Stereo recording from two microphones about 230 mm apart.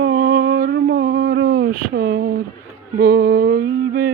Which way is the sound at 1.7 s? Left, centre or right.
Right.